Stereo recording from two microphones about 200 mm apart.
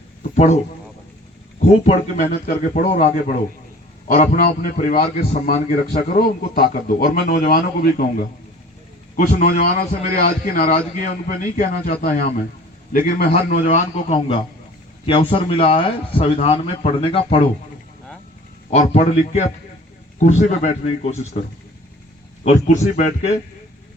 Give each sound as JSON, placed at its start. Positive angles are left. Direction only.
{"t": 0.2, "sound": "a sound", "side_deg": 35}
{"t": 1.8, "sound": "a man's voice", "side_deg": 35}
{"t": 18.7, "sound": "a man's voice", "side_deg": 30}
{"t": 22.4, "sound": "a man's voice", "side_deg": 35}